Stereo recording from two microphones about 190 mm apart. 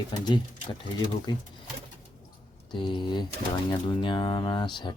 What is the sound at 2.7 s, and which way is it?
Speech, 25° left (ahead or behind).